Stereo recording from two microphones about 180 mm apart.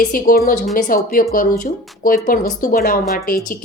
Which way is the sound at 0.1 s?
50° left (ahead or behind).